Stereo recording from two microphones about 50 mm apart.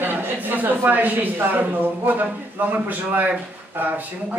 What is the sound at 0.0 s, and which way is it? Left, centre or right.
Speech, right.